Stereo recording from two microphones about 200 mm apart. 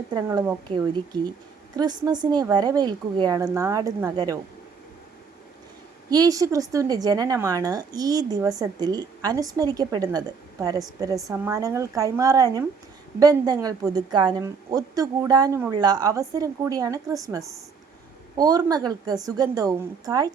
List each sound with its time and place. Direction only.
0.1 s speech: 20° right (ahead or behind)
6.1 s a woman's voice: 20° right (ahead or behind)